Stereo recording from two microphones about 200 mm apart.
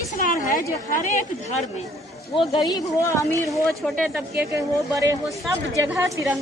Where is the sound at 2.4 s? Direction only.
25° left (ahead or behind).